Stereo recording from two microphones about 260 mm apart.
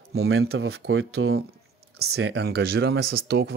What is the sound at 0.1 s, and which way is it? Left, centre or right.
Speech, right.